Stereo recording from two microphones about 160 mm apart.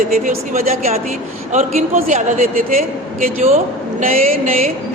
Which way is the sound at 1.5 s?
50° right (ahead or behind).